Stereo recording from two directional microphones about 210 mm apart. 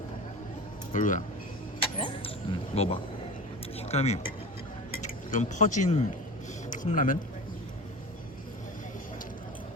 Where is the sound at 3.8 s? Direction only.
30° left (ahead or behind).